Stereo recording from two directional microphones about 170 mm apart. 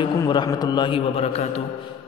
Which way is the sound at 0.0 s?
25° left (ahead or behind).